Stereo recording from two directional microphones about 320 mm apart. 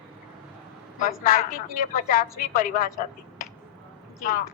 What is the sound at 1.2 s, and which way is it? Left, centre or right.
A woman's voice, left.